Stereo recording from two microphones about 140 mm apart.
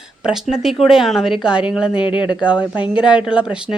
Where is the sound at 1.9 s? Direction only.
35° left (ahead or behind).